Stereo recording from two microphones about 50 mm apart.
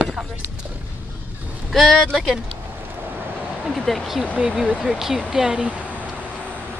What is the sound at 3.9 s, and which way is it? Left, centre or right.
Speech, centre.